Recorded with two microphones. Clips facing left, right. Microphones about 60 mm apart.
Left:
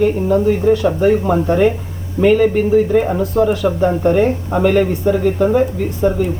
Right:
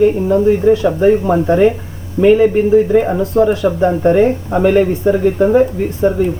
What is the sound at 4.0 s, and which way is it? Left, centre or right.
Speech, right.